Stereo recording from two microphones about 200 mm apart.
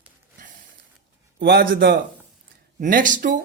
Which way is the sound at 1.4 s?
55° right (ahead or behind).